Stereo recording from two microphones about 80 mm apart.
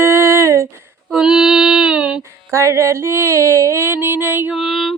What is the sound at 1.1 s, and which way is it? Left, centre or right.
Female singing, centre.